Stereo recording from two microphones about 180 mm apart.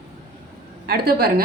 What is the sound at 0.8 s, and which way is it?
Speech, 60° right (ahead or behind).